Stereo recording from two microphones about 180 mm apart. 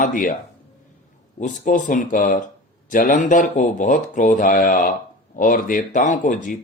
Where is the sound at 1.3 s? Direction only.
45° left (ahead or behind).